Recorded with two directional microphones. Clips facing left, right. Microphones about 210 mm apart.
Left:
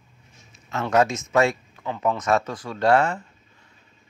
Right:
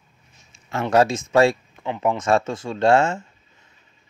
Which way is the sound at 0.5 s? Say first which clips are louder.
Right 3 dB; 30° right (ahead or behind).